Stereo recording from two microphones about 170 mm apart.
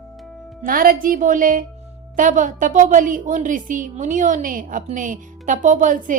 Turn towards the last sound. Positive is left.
turn(degrees=-50)  # may be behind; listen again after turning